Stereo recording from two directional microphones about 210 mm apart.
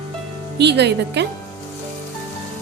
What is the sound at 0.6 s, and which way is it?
Speech, 55° right (ahead or behind).